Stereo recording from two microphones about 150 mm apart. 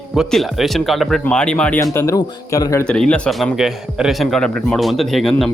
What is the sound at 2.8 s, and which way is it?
A man's voice, 5° left (ahead or behind).